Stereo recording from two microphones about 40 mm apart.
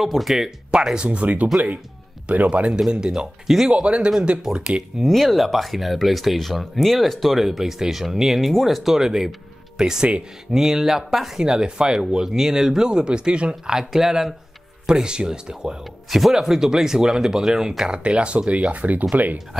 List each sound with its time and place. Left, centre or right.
0.0 s speech: centre
0.9 s speech: right
2.9 s speech: centre
3.6 s speech: right
4.4 s speech: centre
4.9 s speech: centre
11.3 s speech: right
16.1 s speech: centre
18.0 s speech: right
18.7 s speech: right